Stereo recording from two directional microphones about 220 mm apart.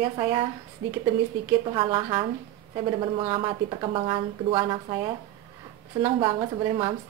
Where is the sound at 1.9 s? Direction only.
15° right (ahead or behind).